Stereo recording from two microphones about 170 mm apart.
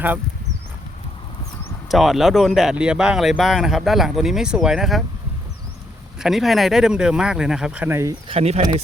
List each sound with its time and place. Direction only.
1.9 s speech: centre (ahead or behind)
6.1 s speech: centre (ahead or behind)
8.3 s speech: 35° right (ahead or behind)